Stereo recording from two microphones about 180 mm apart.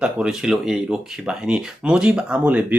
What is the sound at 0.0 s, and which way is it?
Speech, 5° right (ahead or behind).